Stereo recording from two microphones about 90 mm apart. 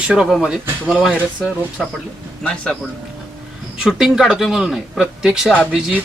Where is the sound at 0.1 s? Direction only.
5° right (ahead or behind).